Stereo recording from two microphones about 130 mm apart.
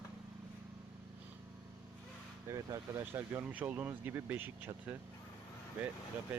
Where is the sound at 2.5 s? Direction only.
25° right (ahead or behind).